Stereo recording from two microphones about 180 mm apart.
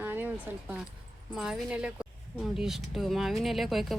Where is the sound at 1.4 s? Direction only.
5° right (ahead or behind).